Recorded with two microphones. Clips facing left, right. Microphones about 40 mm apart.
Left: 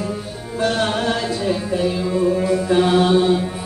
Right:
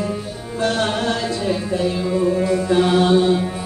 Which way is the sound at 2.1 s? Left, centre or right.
Centre.